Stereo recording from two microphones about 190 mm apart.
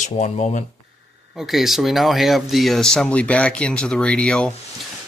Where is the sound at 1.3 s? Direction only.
Centre (ahead or behind).